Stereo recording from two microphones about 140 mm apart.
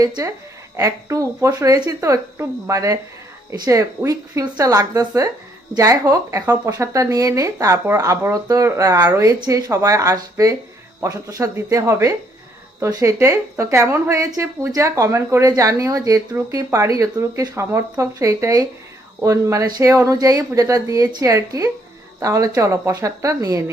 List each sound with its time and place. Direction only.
0.0 s a woman's voice: 25° right (ahead or behind)